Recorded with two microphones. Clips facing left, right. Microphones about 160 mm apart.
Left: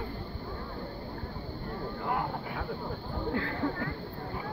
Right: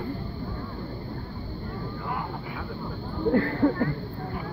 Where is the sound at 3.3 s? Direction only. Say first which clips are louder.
Right 10 dB; 50° right (ahead or behind).